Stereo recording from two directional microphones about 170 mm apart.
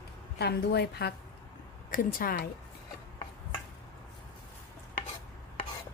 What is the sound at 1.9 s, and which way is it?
Speech, 60° left (ahead or behind).